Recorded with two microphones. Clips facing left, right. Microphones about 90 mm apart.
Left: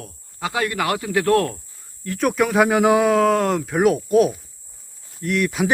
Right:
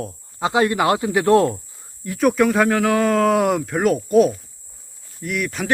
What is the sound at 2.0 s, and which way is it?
Speech, centre (ahead or behind).